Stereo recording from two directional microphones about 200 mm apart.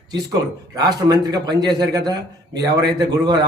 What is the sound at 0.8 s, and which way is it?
A man's voice, 20° right (ahead or behind).